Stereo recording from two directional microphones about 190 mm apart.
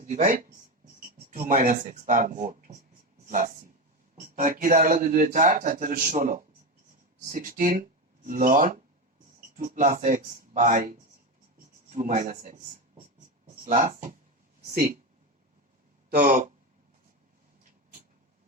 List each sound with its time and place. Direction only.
0.0 s a man's voice: 40° right (ahead or behind)
16.1 s a man's voice: 40° right (ahead or behind)